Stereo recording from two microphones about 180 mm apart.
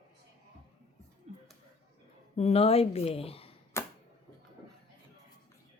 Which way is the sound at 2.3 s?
35° left (ahead or behind).